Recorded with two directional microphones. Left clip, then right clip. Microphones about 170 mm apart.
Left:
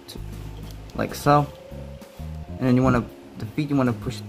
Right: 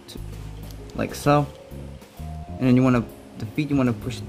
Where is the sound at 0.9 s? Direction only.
20° right (ahead or behind).